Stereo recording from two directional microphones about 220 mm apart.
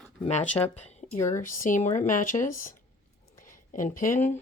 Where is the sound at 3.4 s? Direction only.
35° left (ahead or behind).